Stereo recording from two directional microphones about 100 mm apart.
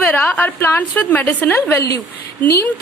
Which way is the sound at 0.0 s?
15° left (ahead or behind).